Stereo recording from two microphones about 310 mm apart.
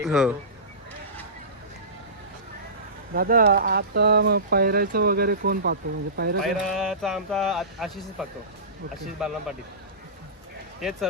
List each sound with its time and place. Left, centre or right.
0.0 s speech: centre
3.2 s speech: right
6.4 s speech: centre
10.8 s speech: centre